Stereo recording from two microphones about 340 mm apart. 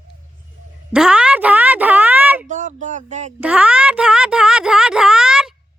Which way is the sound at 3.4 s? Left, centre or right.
Centre.